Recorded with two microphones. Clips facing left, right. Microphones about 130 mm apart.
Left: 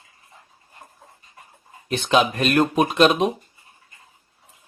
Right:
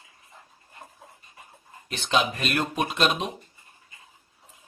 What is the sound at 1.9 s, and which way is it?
Speech, 45° left (ahead or behind).